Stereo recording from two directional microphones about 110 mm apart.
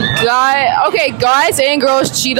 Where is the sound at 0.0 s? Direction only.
20° right (ahead or behind).